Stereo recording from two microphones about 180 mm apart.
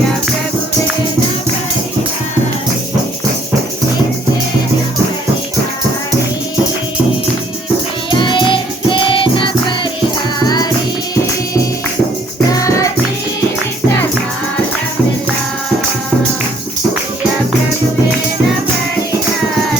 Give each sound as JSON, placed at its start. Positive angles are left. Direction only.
{"t": 8.1, "sound": "music", "side_deg": 25}
{"t": 12.5, "sound": "music", "side_deg": 20}